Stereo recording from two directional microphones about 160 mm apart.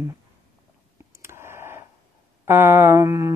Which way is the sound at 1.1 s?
15° right (ahead or behind).